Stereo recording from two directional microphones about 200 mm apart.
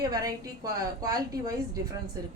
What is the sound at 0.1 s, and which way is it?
A woman's voice, 15° right (ahead or behind).